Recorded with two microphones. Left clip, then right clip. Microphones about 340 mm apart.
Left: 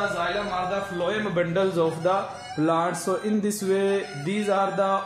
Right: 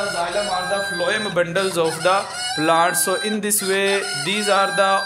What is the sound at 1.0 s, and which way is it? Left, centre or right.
Speech, right.